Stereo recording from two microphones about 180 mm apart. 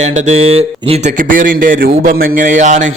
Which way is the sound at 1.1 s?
50° right (ahead or behind).